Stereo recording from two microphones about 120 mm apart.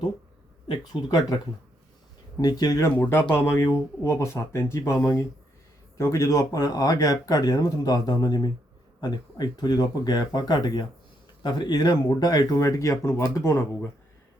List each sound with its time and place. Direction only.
0.7 s speech: 35° left (ahead or behind)
2.4 s speech: 35° left (ahead or behind)
2.9 s speech: 15° left (ahead or behind)